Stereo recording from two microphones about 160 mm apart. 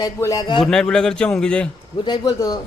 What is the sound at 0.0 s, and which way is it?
Speech, 20° left (ahead or behind).